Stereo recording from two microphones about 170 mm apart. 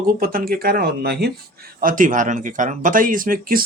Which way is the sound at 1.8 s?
50° right (ahead or behind).